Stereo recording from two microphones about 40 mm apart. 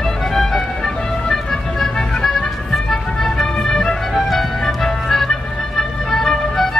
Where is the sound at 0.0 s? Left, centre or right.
Centre.